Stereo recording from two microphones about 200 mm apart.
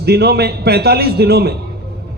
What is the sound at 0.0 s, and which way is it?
A man's voice, 55° right (ahead or behind).